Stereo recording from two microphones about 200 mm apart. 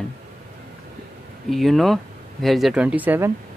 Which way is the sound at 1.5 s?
Centre (ahead or behind).